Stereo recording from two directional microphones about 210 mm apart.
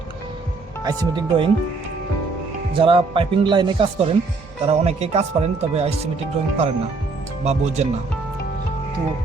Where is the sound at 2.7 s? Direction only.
25° right (ahead or behind).